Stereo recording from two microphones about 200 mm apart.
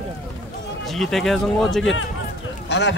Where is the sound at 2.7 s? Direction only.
60° left (ahead or behind).